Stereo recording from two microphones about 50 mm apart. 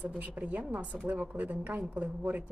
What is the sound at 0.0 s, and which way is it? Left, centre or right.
A woman's voice, right.